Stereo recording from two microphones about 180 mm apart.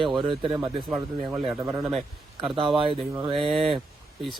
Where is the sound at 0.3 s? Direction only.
25° right (ahead or behind).